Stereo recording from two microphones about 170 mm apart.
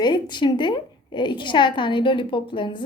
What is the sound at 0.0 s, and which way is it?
A woman's voice, 25° left (ahead or behind).